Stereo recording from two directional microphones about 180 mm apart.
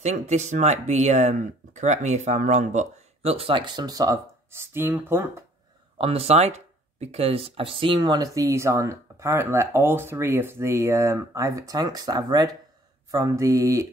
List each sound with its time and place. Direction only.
0.0 s speech: 40° right (ahead or behind); by 5.4 s 10° right (ahead or behind)
5.9 s speech: 35° right (ahead or behind)
13.1 s mantra: 20° right (ahead or behind)